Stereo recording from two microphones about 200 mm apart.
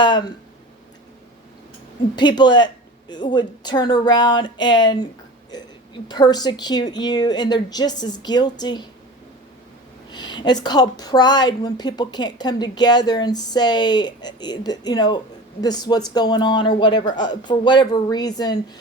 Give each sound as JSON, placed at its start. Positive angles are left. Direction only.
{"t": 0.0, "sound": "a woman's voice", "side_deg": 20}
{"t": 2.1, "sound": "a woman's voice", "side_deg": 20}
{"t": 10.1, "sound": "a woman's voice", "side_deg": 20}